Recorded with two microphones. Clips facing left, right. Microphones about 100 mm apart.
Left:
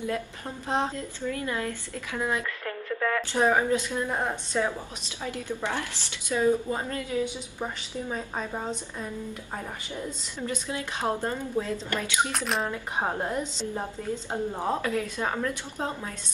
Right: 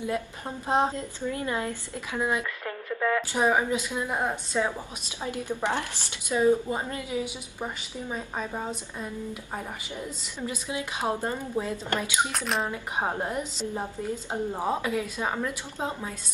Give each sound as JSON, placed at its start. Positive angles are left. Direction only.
{"t": 0.7, "sound": "a woman's voice", "side_deg": -20}
{"t": 7.9, "sound": "a woman's voice", "side_deg": -5}
{"t": 10.4, "sound": "a woman's voice", "side_deg": -15}
{"t": 12.3, "sound": "a woman's voice", "side_deg": 0}
{"t": 12.6, "sound": "a woman's voice", "side_deg": -15}